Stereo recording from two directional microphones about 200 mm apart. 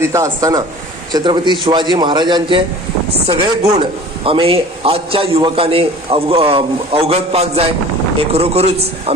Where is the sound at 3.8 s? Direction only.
25° right (ahead or behind).